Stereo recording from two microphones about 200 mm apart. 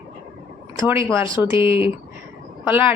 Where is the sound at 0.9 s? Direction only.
15° right (ahead or behind).